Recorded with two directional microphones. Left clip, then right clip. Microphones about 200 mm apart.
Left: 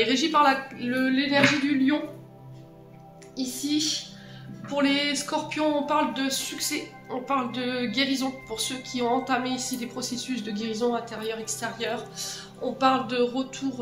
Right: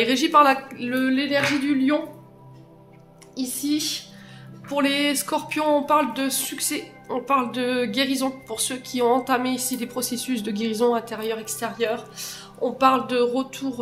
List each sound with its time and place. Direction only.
0.0 s speech: 50° right (ahead or behind)
3.3 s speech: 55° right (ahead or behind)